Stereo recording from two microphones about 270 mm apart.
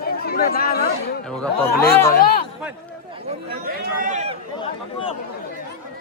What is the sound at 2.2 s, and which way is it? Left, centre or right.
Speech, left.